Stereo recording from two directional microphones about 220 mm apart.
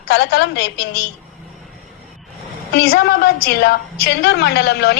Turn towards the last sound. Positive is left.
turn(degrees=45)  # may be behind; listen again after turning